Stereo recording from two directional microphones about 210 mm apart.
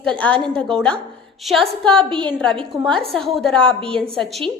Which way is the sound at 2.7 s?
Centre (ahead or behind).